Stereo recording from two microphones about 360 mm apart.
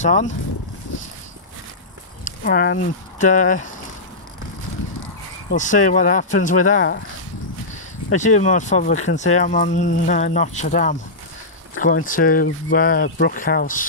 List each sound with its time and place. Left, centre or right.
0.0 s speech: centre
2.2 s speech: left
5.5 s speech: left
8.2 s speech: centre